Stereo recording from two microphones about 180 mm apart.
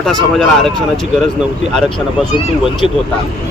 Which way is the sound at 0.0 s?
Centre (ahead or behind).